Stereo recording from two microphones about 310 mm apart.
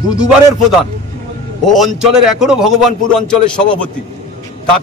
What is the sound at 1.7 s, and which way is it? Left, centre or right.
Speech, centre.